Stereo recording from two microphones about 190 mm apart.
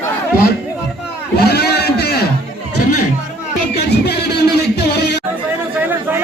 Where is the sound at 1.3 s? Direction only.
55° left (ahead or behind).